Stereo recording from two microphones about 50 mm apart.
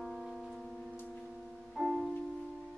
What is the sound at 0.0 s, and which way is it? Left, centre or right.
Music, centre.